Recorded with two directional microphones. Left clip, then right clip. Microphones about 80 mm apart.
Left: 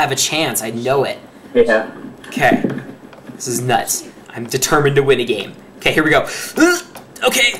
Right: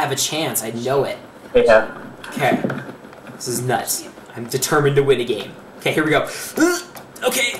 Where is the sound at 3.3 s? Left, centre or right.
Centre.